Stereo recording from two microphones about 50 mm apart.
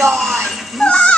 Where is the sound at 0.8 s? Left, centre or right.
Left.